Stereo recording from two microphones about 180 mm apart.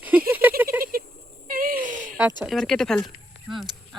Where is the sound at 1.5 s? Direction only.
55° right (ahead or behind).